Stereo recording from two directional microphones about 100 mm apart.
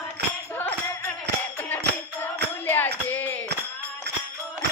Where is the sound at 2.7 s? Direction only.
20° left (ahead or behind).